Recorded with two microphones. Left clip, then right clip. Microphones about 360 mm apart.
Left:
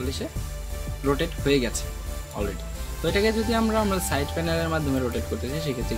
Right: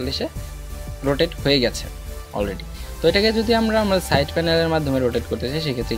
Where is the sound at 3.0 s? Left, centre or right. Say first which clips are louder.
Right 6 dB; centre.